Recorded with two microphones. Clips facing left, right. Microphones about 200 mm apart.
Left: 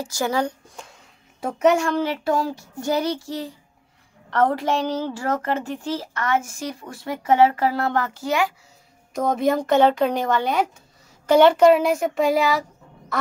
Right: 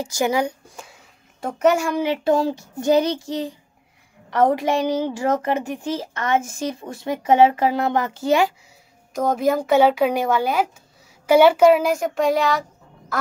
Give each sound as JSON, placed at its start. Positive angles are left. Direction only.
{"t": 0.0, "sound": "speech", "side_deg": -15}
{"t": 0.8, "sound": "a woman's voice", "side_deg": 0}
{"t": 9.1, "sound": "speech", "side_deg": 0}
{"t": 13.1, "sound": "quack", "side_deg": 0}